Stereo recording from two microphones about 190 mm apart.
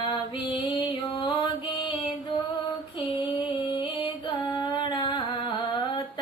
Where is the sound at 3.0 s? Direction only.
25° left (ahead or behind).